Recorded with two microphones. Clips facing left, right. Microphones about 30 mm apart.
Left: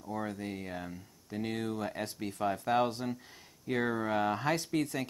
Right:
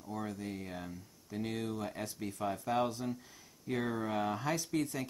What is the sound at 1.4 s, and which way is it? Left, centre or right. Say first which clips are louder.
Speech: left 3 dB; left.